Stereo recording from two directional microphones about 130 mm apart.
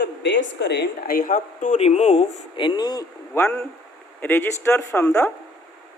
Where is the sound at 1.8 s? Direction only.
60° left (ahead or behind).